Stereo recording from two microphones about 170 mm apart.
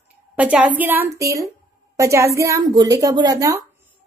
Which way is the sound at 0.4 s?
5° right (ahead or behind).